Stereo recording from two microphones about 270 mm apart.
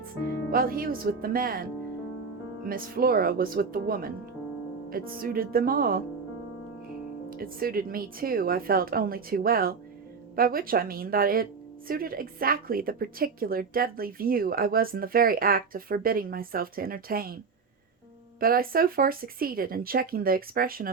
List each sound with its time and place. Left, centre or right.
0.5 s a woman's voice: right
2.6 s a woman's voice: right
7.3 s a woman's voice: right
18.3 s a woman's voice: right